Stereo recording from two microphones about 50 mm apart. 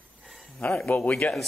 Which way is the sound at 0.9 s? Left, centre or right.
Left.